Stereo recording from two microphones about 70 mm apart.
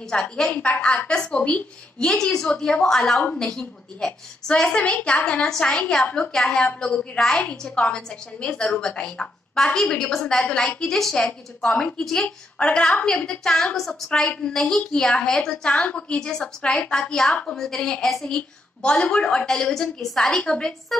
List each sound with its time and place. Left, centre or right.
0.1 s a woman's voice: centre
2.3 s a woman's voice: centre
5.4 s a woman's voice: centre
6.3 s a woman's voice: centre
14.2 s a woman's voice: centre